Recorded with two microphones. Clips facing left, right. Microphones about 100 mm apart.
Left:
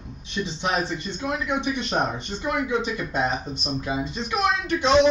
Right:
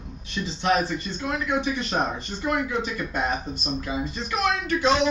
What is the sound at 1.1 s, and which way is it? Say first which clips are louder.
Speech: even; 20° left (ahead or behind).